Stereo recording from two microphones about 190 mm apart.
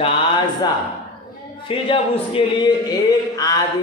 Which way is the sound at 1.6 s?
30° left (ahead or behind).